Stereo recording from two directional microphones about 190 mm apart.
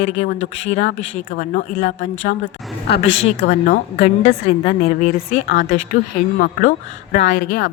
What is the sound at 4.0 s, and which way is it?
A woman's voice, 35° left (ahead or behind).